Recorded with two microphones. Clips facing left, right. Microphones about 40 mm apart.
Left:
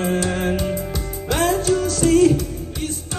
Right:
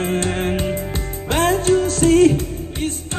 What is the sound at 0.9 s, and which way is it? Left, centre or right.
Music, right.